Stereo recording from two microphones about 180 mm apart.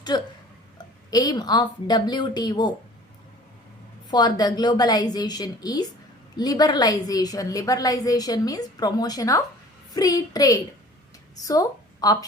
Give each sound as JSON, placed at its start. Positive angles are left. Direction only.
{"t": 0.1, "sound": "a woman's voice", "side_deg": 25}
{"t": 4.1, "sound": "a woman's voice", "side_deg": 25}